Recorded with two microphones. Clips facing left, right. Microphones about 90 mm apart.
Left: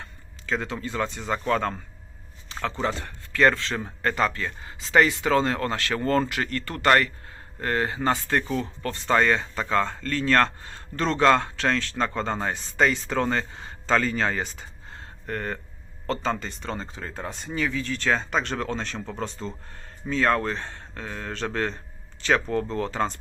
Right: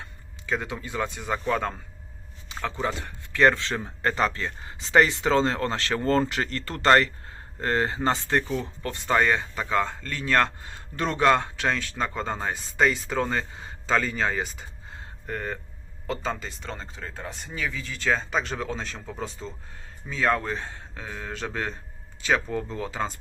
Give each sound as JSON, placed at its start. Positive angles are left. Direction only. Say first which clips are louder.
{"t": 0.4, "sound": "speech", "louder": "left 1 dB", "side_deg": -15}
{"t": 2.5, "sound": "a sound", "louder": "left 2 dB", "side_deg": -15}
{"t": 2.8, "sound": "speech", "louder": "left 1 dB", "side_deg": -20}